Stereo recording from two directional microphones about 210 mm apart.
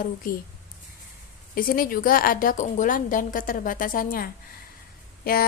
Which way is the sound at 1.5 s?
40° left (ahead or behind).